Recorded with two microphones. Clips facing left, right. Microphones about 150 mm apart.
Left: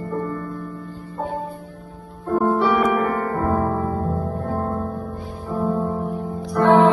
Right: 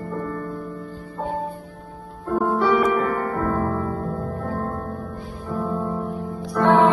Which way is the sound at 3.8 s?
40° left (ahead or behind).